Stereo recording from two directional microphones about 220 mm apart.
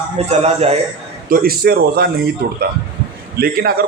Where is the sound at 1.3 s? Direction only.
45° right (ahead or behind).